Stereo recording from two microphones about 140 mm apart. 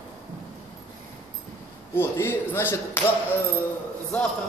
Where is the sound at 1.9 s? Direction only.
15° left (ahead or behind).